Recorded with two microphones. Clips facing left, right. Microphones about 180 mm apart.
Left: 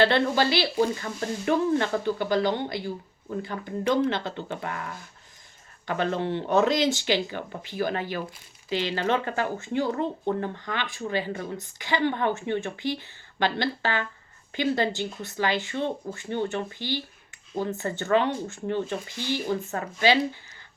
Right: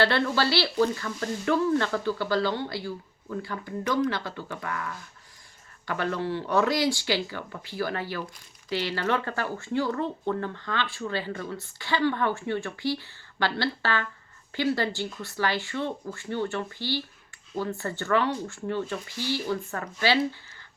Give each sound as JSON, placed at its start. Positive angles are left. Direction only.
{"t": 0.0, "sound": "speech", "side_deg": 20}